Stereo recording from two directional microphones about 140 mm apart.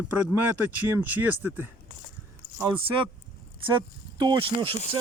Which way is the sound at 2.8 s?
35° right (ahead or behind).